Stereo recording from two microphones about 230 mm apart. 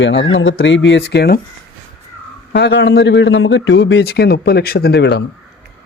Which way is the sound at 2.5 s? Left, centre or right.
Left.